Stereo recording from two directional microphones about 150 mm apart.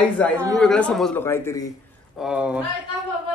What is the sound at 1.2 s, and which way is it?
Speech, 15° left (ahead or behind).